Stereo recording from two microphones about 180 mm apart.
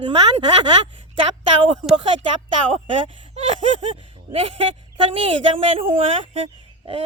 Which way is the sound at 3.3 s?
35° right (ahead or behind).